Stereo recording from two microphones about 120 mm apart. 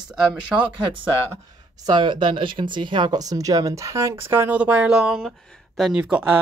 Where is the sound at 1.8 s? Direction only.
40° right (ahead or behind); by 6.0 s centre (ahead or behind).